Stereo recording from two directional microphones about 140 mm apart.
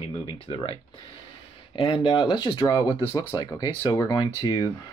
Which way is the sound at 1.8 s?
40° left (ahead or behind).